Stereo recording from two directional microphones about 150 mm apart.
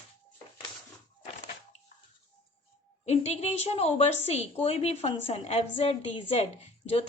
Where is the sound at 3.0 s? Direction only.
45° left (ahead or behind).